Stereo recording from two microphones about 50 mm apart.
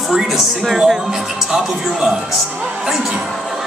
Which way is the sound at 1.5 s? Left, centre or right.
Centre.